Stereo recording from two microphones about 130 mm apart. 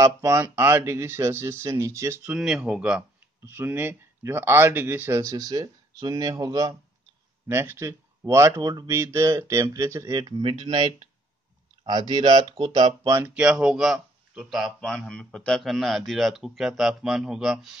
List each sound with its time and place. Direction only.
0.0 s speech: 25° right (ahead or behind)
2.3 s speech: 5° right (ahead or behind); by 10.2 s 25° right (ahead or behind)
10.2 s speech: 35° right (ahead or behind)
13.1 s speech: 15° right (ahead or behind)